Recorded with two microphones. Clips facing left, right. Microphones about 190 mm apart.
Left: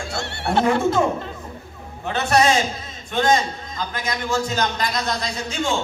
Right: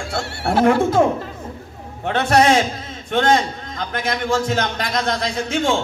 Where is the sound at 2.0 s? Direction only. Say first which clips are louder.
Right 3 dB; 60° right (ahead or behind).